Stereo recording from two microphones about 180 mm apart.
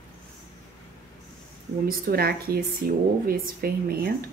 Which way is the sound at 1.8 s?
55° right (ahead or behind).